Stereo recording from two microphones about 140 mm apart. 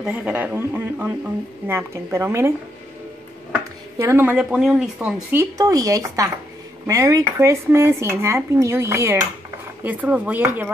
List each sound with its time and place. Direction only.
0.0 s a man's voice: 10° right (ahead or behind)
4.0 s a man's voice: 15° right (ahead or behind)
4.4 s speech: 5° right (ahead or behind)
5.3 s a man's voice: 20° right (ahead or behind)